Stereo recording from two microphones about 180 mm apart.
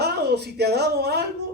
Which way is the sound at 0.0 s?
65° right (ahead or behind).